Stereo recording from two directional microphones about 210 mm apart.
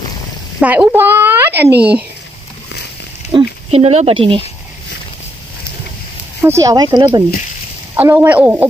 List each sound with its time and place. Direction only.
0.6 s a woman's voice: 10° right (ahead or behind)
3.3 s speech: 30° right (ahead or behind)
6.4 s speech: 15° right (ahead or behind)